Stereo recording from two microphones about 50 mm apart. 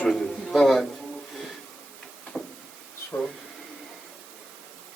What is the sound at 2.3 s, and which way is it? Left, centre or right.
Vehicle, centre.